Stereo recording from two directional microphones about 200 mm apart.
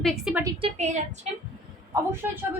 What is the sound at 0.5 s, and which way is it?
Speech, 30° right (ahead or behind).